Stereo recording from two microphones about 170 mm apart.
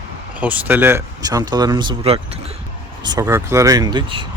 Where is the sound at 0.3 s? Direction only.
10° right (ahead or behind).